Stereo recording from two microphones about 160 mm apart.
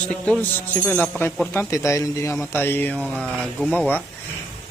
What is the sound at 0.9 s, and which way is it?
A man's voice, 10° left (ahead or behind).